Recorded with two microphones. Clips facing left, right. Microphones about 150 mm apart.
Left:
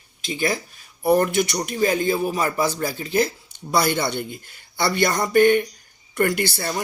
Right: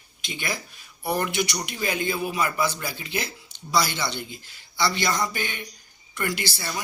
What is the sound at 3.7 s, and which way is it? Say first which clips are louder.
Speech: left 4 dB; 55° left (ahead or behind).